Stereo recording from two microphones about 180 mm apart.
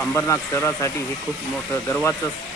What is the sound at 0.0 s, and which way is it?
Speech, 10° left (ahead or behind).